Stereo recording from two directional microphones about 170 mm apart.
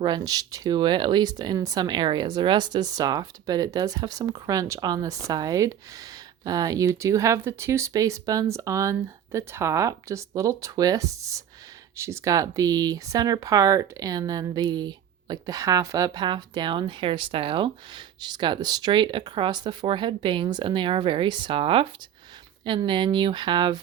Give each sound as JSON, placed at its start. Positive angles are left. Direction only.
{"t": 0.0, "sound": "speech", "side_deg": -25}